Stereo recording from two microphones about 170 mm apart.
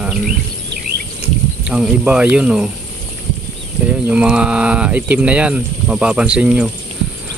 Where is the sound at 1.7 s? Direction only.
5° right (ahead or behind).